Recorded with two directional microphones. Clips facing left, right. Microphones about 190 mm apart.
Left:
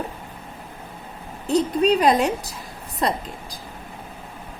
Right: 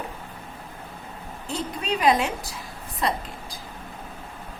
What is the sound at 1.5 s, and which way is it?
Speech, 40° left (ahead or behind).